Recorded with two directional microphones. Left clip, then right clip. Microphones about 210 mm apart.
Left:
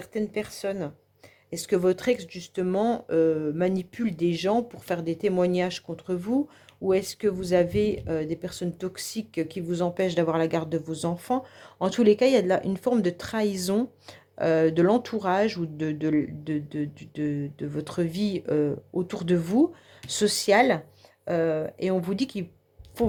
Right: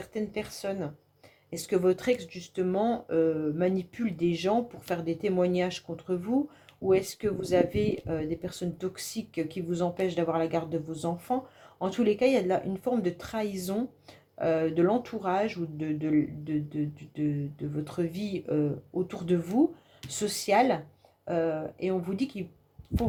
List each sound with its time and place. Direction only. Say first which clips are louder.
0.0 s speech: left 4 dB; 40° left (ahead or behind)